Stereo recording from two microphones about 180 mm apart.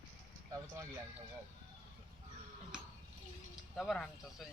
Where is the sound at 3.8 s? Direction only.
Centre (ahead or behind).